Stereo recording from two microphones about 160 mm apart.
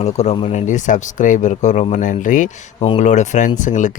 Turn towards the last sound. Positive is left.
turn(degrees=50)  # may be behind; listen again after turning